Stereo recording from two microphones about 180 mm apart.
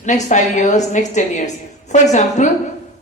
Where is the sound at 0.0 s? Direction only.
40° left (ahead or behind).